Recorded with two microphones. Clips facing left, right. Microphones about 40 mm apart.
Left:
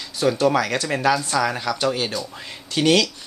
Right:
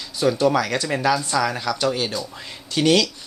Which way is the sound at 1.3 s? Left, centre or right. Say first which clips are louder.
Even; centre.